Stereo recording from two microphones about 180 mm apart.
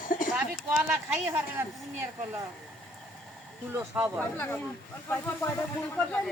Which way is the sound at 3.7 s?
10° right (ahead or behind).